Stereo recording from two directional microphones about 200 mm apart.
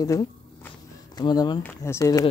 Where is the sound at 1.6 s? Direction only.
15° left (ahead or behind).